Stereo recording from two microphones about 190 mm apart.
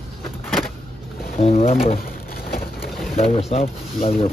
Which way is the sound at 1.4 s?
30° left (ahead or behind).